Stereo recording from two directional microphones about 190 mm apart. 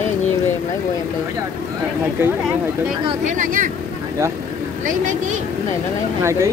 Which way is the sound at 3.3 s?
45° right (ahead or behind).